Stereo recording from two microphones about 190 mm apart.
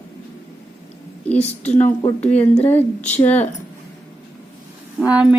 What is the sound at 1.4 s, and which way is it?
Speech, 35° left (ahead or behind).